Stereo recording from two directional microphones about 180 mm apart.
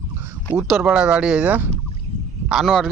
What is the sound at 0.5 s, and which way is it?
Speech, 10° right (ahead or behind).